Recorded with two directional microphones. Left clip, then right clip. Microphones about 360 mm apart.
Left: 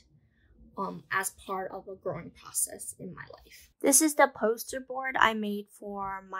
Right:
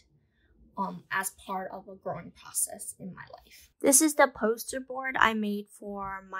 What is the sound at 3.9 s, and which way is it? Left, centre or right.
Speech, centre.